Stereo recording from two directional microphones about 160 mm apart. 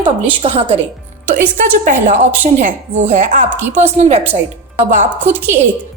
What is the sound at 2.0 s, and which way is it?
Speech, 50° right (ahead or behind).